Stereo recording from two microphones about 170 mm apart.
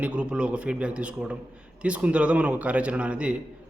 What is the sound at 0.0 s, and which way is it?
A man's voice, 5° right (ahead or behind).